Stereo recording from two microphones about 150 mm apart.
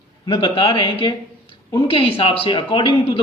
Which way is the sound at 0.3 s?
35° left (ahead or behind).